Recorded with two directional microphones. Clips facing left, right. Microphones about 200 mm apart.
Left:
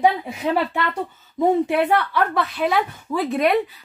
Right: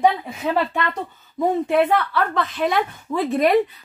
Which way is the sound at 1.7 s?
10° left (ahead or behind).